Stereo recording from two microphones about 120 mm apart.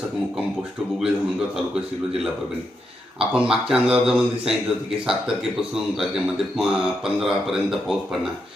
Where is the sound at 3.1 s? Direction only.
5° right (ahead or behind).